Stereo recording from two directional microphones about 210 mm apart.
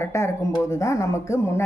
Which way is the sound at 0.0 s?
15° left (ahead or behind).